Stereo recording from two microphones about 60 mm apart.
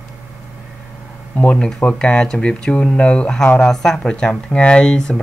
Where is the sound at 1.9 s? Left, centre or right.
Centre.